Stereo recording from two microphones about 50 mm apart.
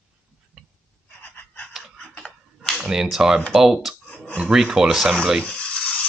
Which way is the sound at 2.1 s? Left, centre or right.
Centre.